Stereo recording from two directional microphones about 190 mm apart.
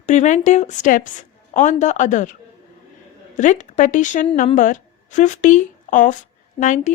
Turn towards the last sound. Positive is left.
turn(degrees=40)  # may be behind; listen again after turning